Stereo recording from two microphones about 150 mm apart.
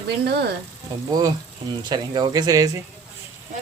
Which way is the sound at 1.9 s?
25° right (ahead or behind).